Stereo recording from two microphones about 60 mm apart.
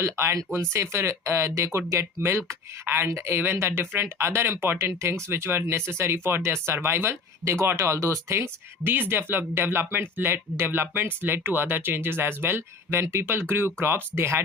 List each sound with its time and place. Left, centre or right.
0.0 s speech: right
8.8 s speech: right